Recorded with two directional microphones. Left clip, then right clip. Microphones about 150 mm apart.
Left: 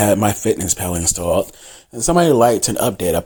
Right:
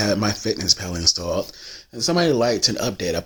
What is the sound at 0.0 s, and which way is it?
Speech, 25° left (ahead or behind).